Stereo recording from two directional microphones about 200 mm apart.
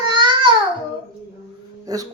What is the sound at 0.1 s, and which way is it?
Babbling, 20° right (ahead or behind).